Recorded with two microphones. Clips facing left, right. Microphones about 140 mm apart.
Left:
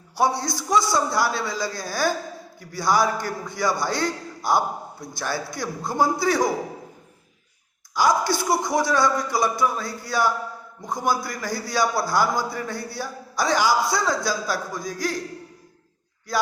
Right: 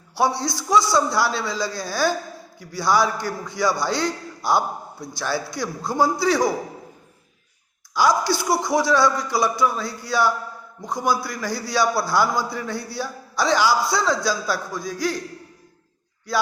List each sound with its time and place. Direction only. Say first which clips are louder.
0.2 s a man's voice: right 1 dB; 50° left (ahead or behind)
7.9 s a man's voice: right 1 dB; 50° left (ahead or behind)